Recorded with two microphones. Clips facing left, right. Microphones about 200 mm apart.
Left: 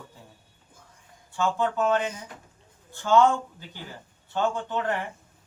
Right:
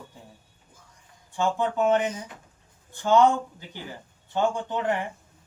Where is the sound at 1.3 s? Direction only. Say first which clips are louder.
Right 1 dB; 15° right (ahead or behind).